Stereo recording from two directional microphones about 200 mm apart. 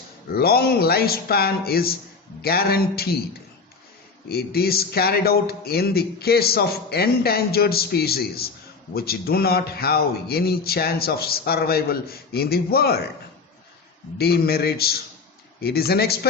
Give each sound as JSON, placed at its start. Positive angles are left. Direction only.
{"t": 0.3, "sound": "speech", "side_deg": 50}
{"t": 4.3, "sound": "speech", "side_deg": 50}
{"t": 14.2, "sound": "speech", "side_deg": 50}